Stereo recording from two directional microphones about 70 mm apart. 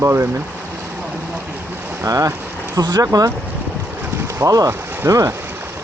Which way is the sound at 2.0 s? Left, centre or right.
Right.